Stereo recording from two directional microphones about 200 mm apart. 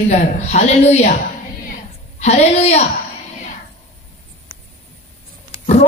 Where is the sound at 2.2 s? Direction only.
30° left (ahead or behind).